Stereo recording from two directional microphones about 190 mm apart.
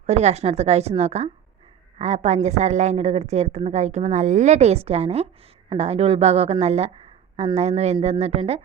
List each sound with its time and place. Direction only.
0.0 s a woman's voice: 35° right (ahead or behind)